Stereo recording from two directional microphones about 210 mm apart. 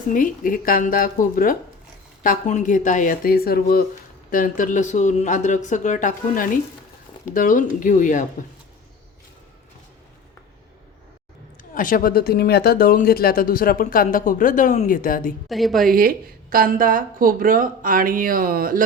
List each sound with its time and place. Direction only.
0.1 s speech: 40° left (ahead or behind)
11.7 s speech: 40° left (ahead or behind)
15.4 s a woman's voice: centre (ahead or behind)
15.9 s speech: 45° right (ahead or behind)